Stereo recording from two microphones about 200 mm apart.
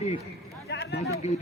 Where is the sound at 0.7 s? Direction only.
60° left (ahead or behind).